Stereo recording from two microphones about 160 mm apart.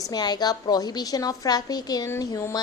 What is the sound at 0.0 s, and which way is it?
Speech, 25° left (ahead or behind).